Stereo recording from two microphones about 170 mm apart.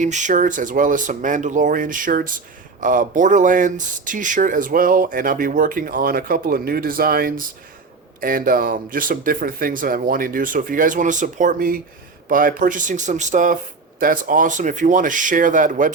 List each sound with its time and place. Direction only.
0.0 s speech: 45° right (ahead or behind)